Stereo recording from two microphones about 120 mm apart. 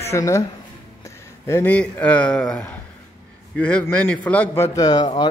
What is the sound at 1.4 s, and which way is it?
Speech, 20° left (ahead or behind).